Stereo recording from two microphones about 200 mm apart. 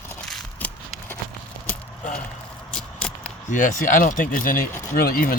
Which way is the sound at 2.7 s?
5° left (ahead or behind).